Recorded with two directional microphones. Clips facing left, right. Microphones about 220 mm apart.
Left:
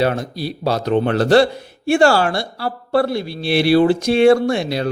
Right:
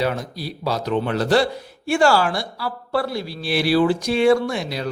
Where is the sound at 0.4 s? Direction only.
65° left (ahead or behind).